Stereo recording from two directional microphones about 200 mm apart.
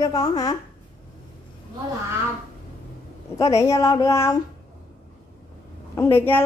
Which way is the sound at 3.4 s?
15° left (ahead or behind).